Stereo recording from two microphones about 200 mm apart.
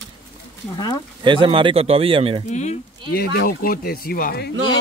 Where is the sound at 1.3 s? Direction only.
25° right (ahead or behind).